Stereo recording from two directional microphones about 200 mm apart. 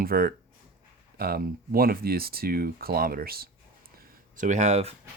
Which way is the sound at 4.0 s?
40° right (ahead or behind).